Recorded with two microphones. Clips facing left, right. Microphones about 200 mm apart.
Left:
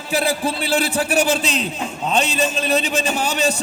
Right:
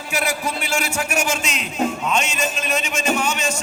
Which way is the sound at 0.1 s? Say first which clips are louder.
Left 4 dB; 30° left (ahead or behind).